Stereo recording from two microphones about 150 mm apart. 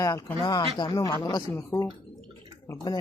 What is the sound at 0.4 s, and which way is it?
A man's voice, 30° left (ahead or behind).